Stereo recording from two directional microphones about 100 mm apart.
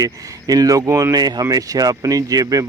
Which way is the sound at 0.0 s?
40° right (ahead or behind).